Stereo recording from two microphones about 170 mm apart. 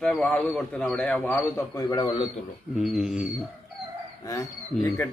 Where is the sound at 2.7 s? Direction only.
5° right (ahead or behind).